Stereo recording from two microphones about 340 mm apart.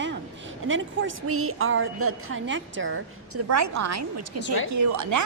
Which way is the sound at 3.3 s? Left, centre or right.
Right.